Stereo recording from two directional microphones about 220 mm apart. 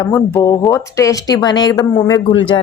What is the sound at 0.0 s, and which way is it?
Speech, 10° left (ahead or behind).